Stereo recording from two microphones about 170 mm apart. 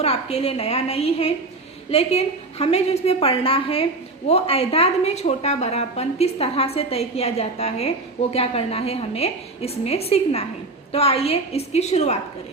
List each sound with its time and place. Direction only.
0.0 s a woman's voice: 35° left (ahead or behind)